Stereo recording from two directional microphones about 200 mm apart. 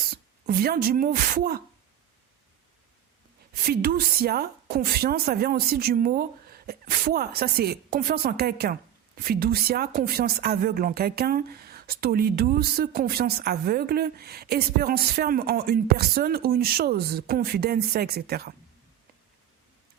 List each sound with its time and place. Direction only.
0.1 s speech: 50° right (ahead or behind)
3.7 s speech: 50° right (ahead or behind)